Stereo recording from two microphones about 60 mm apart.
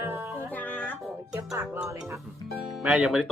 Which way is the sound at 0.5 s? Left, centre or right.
Left.